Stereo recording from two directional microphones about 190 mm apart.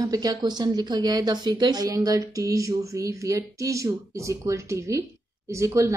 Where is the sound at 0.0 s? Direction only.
20° right (ahead or behind).